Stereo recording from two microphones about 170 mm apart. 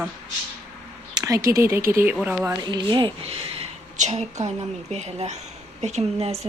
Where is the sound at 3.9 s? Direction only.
45° right (ahead or behind).